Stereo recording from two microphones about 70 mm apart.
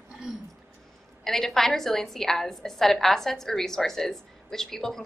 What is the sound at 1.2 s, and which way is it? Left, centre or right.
A woman's voice, centre.